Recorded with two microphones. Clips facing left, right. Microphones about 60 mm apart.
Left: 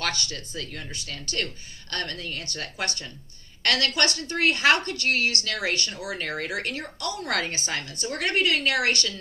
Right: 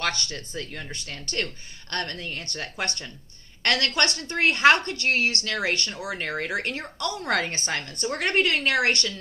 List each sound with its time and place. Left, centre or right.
0.0 s speech: right